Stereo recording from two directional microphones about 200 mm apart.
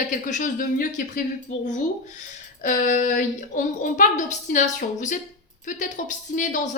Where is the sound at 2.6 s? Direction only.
40° left (ahead or behind).